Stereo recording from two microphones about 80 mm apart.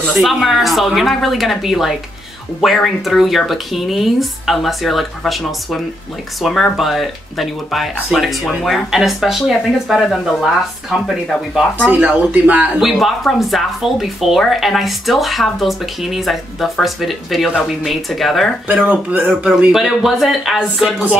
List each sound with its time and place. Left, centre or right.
0.1 s speech: centre
11.8 s speech: centre
12.8 s speech: centre
18.7 s speech: centre
19.7 s speech: centre